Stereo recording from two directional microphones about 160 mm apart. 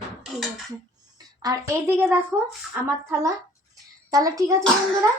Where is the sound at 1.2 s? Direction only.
25° right (ahead or behind).